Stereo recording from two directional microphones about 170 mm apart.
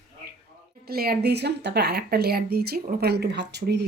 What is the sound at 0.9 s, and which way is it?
Speech, 60° right (ahead or behind).